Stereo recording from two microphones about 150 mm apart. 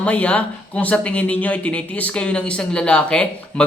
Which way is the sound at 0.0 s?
10° left (ahead or behind).